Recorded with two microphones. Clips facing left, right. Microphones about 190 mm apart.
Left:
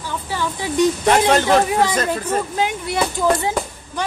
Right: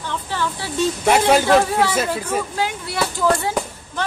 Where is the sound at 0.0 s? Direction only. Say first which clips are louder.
Even; 10° left (ahead or behind).